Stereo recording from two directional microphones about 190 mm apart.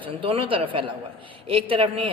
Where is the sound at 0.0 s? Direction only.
30° right (ahead or behind).